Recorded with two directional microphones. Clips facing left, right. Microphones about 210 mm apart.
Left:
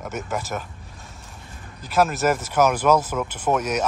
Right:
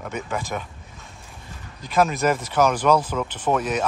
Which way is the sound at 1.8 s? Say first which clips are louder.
Even; 5° left (ahead or behind).